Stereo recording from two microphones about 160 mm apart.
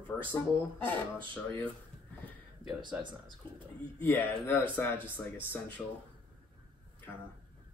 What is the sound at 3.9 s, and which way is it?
Speech, 10° left (ahead or behind).